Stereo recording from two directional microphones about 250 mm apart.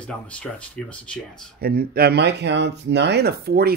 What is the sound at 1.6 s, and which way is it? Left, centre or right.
Speech, right.